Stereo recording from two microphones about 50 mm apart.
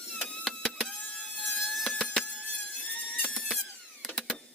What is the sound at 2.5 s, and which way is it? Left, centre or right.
Squeal, left.